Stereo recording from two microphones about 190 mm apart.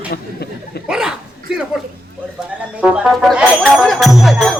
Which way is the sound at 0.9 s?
5° right (ahead or behind).